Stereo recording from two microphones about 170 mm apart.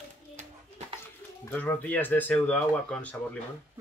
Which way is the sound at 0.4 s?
40° right (ahead or behind).